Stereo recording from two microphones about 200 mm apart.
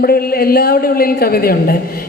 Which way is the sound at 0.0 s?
50° left (ahead or behind).